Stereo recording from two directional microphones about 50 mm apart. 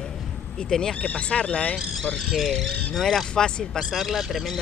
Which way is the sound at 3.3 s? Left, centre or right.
Centre.